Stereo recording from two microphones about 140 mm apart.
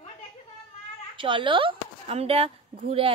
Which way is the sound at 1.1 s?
35° right (ahead or behind).